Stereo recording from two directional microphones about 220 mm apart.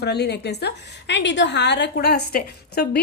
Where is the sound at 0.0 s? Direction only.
50° left (ahead or behind).